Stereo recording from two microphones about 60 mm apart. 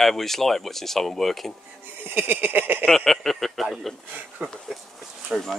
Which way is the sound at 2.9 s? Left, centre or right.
Centre.